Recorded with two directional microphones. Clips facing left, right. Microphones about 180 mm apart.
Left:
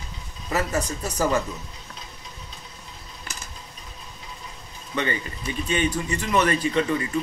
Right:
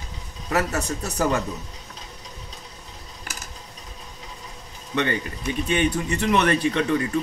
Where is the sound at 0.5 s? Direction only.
75° right (ahead or behind).